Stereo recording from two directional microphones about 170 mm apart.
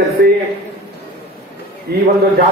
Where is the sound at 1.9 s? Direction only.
65° right (ahead or behind).